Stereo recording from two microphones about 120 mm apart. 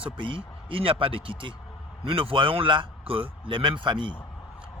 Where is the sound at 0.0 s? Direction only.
45° right (ahead or behind).